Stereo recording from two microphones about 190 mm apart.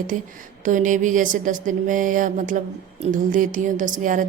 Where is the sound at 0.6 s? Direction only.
40° right (ahead or behind).